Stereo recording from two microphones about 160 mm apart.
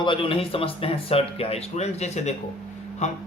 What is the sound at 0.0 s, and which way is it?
Speech, 30° left (ahead or behind).